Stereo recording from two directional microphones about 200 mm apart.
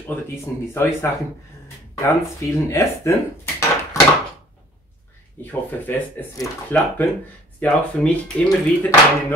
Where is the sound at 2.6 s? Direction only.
15° left (ahead or behind).